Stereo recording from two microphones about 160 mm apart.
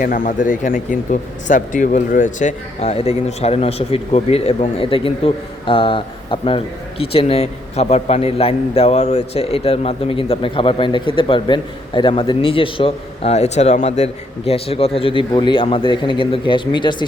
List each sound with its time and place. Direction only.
0.0 s a man's voice: 60° left (ahead or behind); by 17.1 s 30° left (ahead or behind)